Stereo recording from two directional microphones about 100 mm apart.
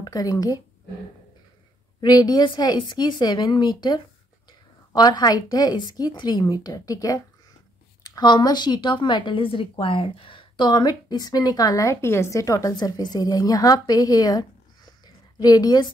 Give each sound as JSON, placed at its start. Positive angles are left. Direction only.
{"t": 0.0, "sound": "speech", "side_deg": 40}
{"t": 2.0, "sound": "speech", "side_deg": 40}
{"t": 15.0, "sound": "a sound", "side_deg": 40}